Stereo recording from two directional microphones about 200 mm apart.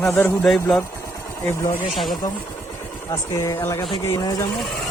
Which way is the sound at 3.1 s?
15° left (ahead or behind).